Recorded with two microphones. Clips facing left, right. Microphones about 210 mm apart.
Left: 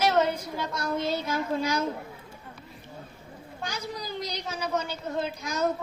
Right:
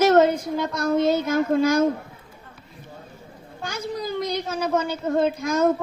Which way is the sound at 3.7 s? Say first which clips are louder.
Right 7 dB; 50° right (ahead or behind).